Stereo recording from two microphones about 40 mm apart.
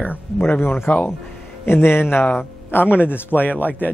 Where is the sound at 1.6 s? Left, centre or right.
Left.